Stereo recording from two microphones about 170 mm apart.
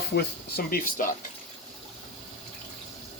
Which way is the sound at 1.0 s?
55° left (ahead or behind).